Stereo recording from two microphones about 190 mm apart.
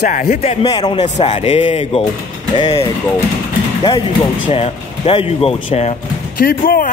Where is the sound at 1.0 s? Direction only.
35° left (ahead or behind).